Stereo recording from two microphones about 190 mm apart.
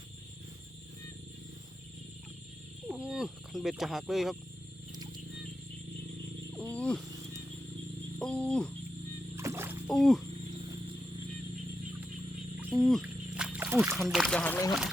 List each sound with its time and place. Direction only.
2.8 s wild animals: 5° right (ahead or behind)
6.5 s a sound: 5° left (ahead or behind)
8.2 s speech: 5° left (ahead or behind)
9.3 s music: 15° right (ahead or behind)
9.9 s speech: centre (ahead or behind)
12.5 s music: centre (ahead or behind)
13.9 s speech: centre (ahead or behind)